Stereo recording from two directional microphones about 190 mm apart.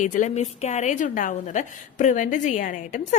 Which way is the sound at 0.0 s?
40° left (ahead or behind).